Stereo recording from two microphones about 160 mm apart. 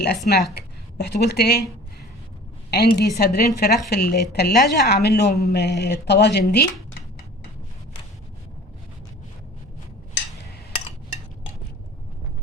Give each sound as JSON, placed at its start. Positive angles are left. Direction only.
{"t": 0.3, "sound": "a woman's voice", "side_deg": 90}
{"t": 2.6, "sound": "a woman's voice", "side_deg": 85}